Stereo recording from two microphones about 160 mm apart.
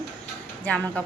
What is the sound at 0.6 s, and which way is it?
Speech, 5° left (ahead or behind).